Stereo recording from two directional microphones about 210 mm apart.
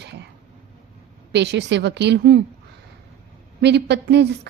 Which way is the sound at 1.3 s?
55° right (ahead or behind).